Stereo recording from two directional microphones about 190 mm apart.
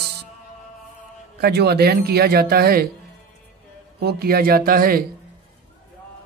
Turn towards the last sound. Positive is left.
turn(degrees=-50)  # may be behind; listen again after turning